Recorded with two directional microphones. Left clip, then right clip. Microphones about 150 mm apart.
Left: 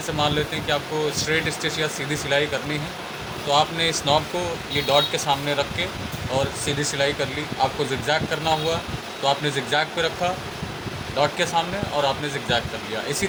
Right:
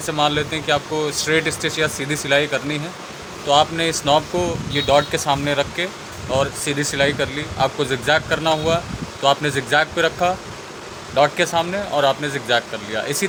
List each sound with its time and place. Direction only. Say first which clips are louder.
0.2 s speech: right 4 dB; 90° right